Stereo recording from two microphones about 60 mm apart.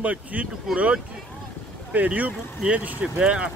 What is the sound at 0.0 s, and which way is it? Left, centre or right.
Speech, right.